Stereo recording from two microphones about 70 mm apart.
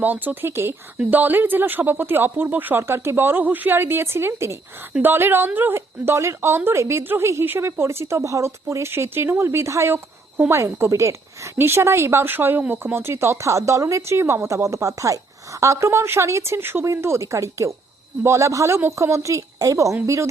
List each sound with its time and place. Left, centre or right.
0.0 s a woman's voice: right